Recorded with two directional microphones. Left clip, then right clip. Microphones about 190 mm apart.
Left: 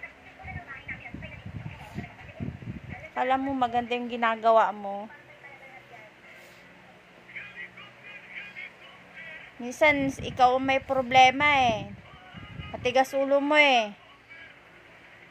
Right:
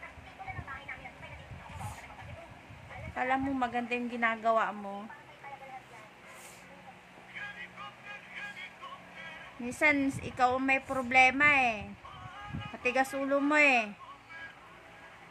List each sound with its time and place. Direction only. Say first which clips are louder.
3.2 s a woman's voice: left 5 dB; 20° left (ahead or behind)
9.8 s a woman's voice: left 5 dB; 20° left (ahead or behind)
10.0 s a woman's voice: left 4 dB; 15° right (ahead or behind)
10.3 s a woman's voice: left 6 dB; 20° left (ahead or behind)
12.8 s a woman's voice: left 6 dB; 20° left (ahead or behind)